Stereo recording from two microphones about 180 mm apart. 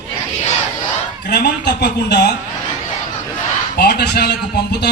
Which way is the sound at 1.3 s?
70° left (ahead or behind).